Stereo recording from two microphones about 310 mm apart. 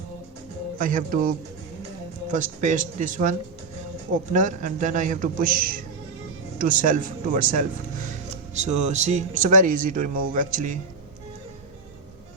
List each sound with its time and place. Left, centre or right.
0.8 s speech: right